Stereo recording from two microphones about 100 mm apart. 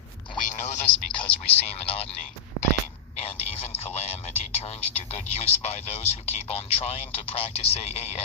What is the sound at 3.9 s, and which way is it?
Speech, 90° left.